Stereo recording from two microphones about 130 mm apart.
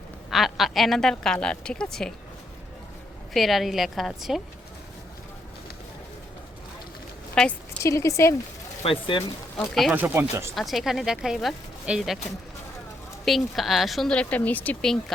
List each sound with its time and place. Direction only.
0.3 s a woman's voice: centre (ahead or behind)
3.3 s a woman's voice: centre (ahead or behind)
7.3 s a sound: 10° left (ahead or behind)
7.8 s speech: 20° left (ahead or behind)
8.8 s speech: 40° left (ahead or behind)
9.9 s speech: 15° right (ahead or behind)
10.5 s a woman's voice: centre (ahead or behind)
13.2 s a woman's voice: centre (ahead or behind)